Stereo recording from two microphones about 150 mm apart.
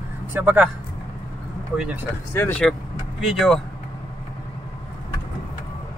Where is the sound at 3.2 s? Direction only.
Centre (ahead or behind).